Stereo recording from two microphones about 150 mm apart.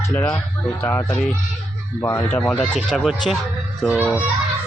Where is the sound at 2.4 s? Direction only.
5° left (ahead or behind).